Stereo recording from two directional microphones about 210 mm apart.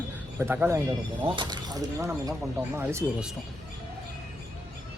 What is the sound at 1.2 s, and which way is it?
Speech, 20° right (ahead or behind).